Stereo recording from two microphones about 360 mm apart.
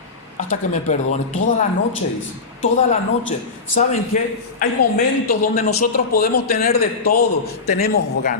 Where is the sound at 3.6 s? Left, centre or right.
Left.